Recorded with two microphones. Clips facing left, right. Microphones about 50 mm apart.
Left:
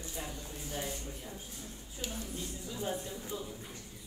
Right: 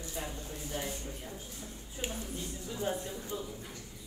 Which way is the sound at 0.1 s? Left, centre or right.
Right.